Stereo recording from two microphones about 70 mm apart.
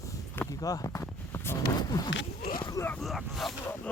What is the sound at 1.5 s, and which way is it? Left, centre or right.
Speech, left.